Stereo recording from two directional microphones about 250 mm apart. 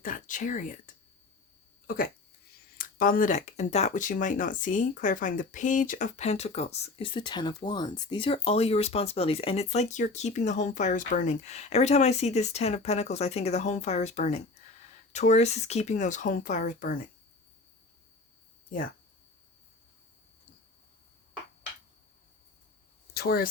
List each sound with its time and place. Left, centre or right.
0.0 s speech: left
2.7 s speech: left
23.1 s speech: left